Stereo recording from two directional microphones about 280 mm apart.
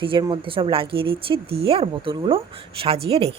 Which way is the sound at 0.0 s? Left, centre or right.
Centre.